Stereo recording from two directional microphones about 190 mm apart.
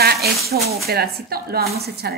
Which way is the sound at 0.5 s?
50° right (ahead or behind).